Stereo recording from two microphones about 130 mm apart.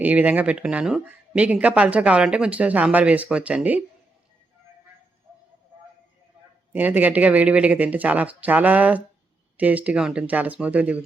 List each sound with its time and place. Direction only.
0.0 s speech: 10° right (ahead or behind)
6.7 s speech: 15° right (ahead or behind)